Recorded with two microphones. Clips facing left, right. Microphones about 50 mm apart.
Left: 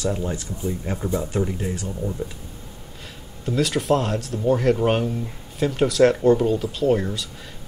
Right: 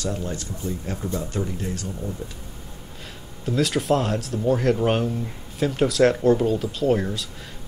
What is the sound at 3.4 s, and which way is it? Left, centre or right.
Speech, centre.